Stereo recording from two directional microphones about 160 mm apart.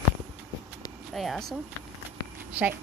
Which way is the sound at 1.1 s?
Centre (ahead or behind).